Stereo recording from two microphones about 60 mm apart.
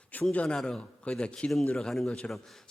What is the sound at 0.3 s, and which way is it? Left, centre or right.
A man's voice, centre.